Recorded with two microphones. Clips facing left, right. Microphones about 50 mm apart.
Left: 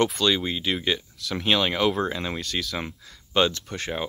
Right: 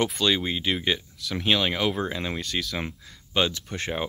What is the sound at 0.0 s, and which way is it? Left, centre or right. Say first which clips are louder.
Speech: left 2 dB; centre.